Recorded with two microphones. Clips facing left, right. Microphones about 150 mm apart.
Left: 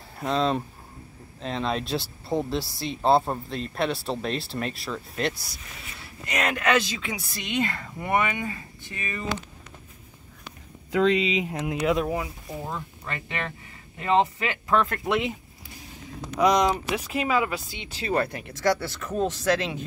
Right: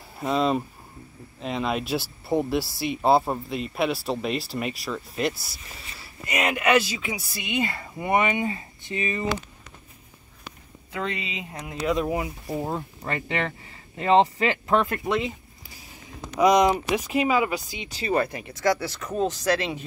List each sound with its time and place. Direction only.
0.2 s speech: 5° right (ahead or behind); by 9.3 s 20° right (ahead or behind)
10.9 s speech: 90° left
11.5 s speech: centre (ahead or behind)
12.6 s speech: 35° right (ahead or behind)
14.7 s speech: 20° right (ahead or behind)
15.0 s speech: 5° left (ahead or behind)
16.3 s speech: 10° right (ahead or behind)